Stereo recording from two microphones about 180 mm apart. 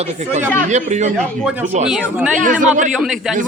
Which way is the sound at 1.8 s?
5° right (ahead or behind).